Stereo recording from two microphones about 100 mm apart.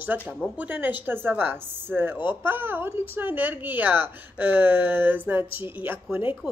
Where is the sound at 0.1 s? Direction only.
20° right (ahead or behind).